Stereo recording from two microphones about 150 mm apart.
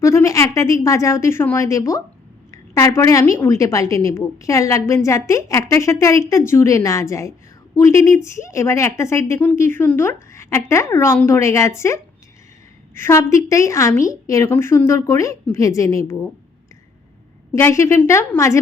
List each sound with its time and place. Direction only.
0.0 s a woman's voice: 20° left (ahead or behind)
17.5 s a woman's voice: 20° left (ahead or behind)